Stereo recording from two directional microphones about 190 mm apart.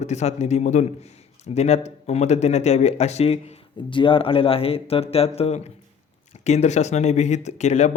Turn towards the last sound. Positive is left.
turn(degrees=35)  # may be behind; listen again after turning